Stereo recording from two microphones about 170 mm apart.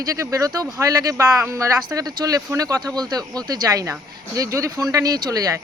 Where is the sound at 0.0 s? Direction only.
20° right (ahead or behind).